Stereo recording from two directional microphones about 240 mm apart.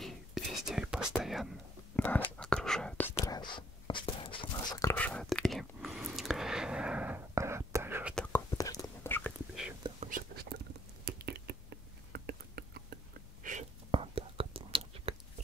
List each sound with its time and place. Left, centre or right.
0.0 s whispering: centre
3.2 s whispering: centre
8.1 s whispering: centre
8.5 s whispering: centre
10.0 s whispering: right
11.1 s a sound: right